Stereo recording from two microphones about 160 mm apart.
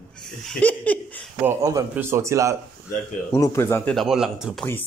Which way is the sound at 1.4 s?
15° right (ahead or behind).